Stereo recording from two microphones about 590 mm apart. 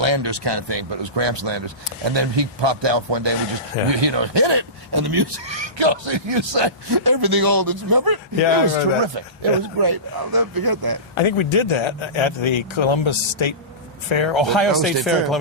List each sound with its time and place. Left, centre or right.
0.0 s speech: right
8.4 s speech: left
9.1 s speech: right
11.1 s speech: left
14.7 s speech: centre